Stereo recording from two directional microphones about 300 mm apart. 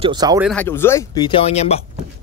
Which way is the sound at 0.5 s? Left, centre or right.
Centre.